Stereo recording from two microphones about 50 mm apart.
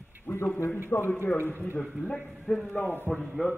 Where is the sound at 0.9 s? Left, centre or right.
Left.